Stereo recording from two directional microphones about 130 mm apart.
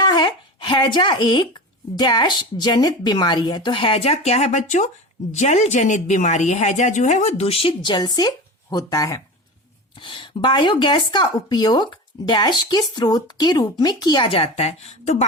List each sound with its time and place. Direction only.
0.0 s speech: 35° left (ahead or behind)
10.0 s speech: 35° left (ahead or behind); by 15.3 s 60° left (ahead or behind)